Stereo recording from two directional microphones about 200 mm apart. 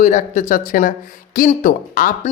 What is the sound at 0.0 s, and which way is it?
Speech, 35° left (ahead or behind).